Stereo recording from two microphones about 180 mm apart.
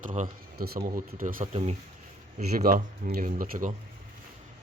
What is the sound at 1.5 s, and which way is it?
Speech, 35° right (ahead or behind).